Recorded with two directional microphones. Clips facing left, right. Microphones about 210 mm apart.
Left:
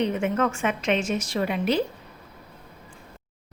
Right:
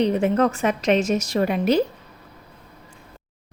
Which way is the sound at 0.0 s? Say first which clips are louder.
Right 5 dB; 35° right (ahead or behind).